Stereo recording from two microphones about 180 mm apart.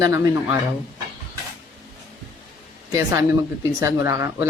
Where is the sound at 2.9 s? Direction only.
15° right (ahead or behind).